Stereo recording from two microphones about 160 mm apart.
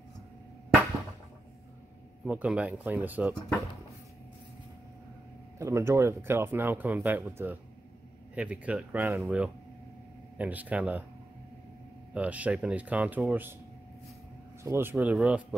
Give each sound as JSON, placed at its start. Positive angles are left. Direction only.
{"t": 2.2, "sound": "speech", "side_deg": -10}
{"t": 5.6, "sound": "speech", "side_deg": -15}
{"t": 12.1, "sound": "speech", "side_deg": -10}
{"t": 14.6, "sound": "speech", "side_deg": -15}